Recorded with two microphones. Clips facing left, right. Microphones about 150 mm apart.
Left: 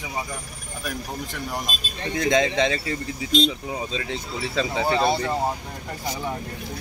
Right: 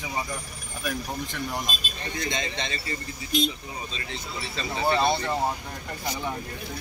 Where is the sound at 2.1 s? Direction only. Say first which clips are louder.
Left 11 dB; 90° left.